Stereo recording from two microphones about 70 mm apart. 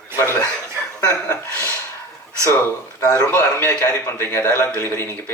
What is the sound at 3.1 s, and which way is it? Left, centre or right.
A man's voice, left.